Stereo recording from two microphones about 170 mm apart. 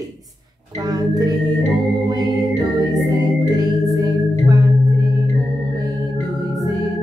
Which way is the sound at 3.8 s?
20° right (ahead or behind).